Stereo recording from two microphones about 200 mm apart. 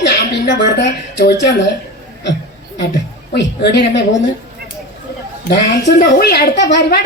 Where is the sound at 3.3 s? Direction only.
60° left (ahead or behind).